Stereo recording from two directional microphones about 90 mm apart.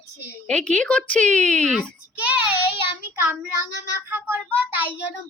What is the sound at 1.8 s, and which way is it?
A child's voice, 15° right (ahead or behind).